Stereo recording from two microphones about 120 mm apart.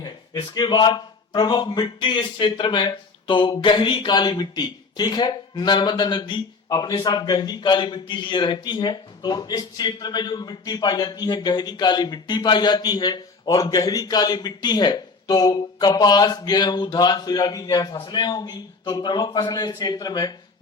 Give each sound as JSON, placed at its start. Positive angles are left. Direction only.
{"t": 0.0, "sound": "a man's voice", "side_deg": 35}